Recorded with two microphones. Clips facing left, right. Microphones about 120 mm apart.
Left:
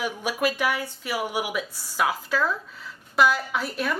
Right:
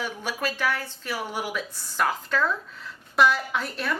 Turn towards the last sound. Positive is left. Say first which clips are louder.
# left 1 dB
turn(degrees=5)  # may be behind; listen again after turning